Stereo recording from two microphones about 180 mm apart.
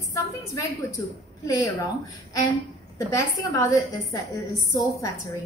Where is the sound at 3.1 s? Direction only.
15° left (ahead or behind).